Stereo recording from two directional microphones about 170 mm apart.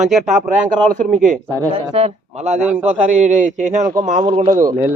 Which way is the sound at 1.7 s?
35° right (ahead or behind).